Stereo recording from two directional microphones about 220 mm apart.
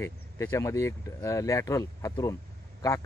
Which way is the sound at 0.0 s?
10° left (ahead or behind).